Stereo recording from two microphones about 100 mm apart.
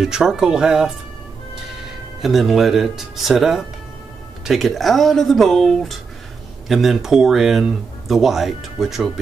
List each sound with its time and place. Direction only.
0.0 s speech: 5° right (ahead or behind)
2.2 s speech: centre (ahead or behind)